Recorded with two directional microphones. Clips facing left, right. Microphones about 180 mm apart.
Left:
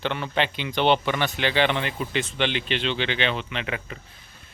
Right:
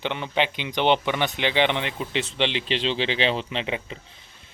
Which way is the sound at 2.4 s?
30° right (ahead or behind).